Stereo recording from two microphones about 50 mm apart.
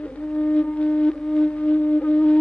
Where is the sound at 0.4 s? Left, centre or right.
Left.